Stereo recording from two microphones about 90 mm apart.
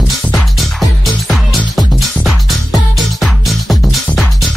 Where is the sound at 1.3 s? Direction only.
Centre (ahead or behind).